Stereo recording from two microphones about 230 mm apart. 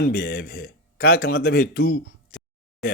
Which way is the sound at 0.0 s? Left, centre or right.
Left.